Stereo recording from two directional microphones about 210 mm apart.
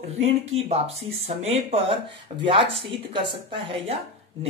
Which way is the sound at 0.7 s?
30° right (ahead or behind).